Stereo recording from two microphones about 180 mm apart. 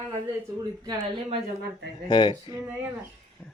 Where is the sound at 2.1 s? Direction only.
25° left (ahead or behind).